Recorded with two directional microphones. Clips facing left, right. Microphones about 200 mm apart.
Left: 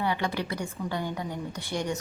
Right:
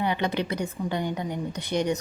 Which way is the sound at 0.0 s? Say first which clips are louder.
Right 3 dB; 20° right (ahead or behind).